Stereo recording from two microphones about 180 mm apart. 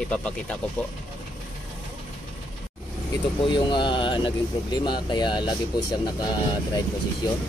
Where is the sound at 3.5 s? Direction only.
25° left (ahead or behind).